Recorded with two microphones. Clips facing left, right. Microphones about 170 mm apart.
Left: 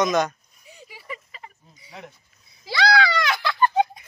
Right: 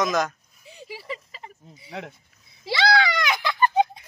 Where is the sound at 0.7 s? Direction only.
30° right (ahead or behind).